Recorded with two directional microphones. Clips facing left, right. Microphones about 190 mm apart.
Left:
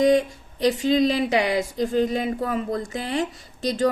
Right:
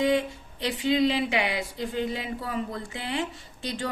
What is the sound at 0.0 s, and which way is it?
Speech, 40° left (ahead or behind).